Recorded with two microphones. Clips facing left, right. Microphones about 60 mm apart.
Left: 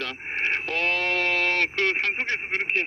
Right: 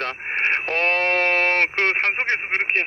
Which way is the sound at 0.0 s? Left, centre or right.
Right.